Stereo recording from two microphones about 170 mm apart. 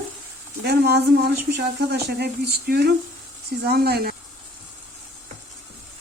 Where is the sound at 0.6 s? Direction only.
70° right (ahead or behind).